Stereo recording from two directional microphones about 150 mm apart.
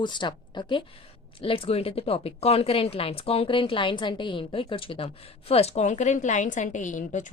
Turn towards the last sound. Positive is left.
turn(degrees=55)  # may be behind; listen again after turning